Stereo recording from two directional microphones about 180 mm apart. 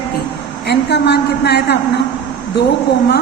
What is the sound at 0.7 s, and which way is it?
A woman's voice, 70° left (ahead or behind).